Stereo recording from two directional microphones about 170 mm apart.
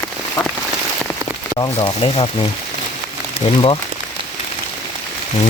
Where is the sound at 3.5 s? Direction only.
30° left (ahead or behind).